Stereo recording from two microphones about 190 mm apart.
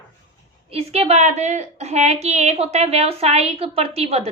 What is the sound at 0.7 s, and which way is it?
Speech, 35° right (ahead or behind).